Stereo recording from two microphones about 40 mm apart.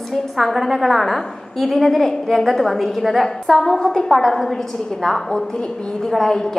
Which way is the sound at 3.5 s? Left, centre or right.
Centre.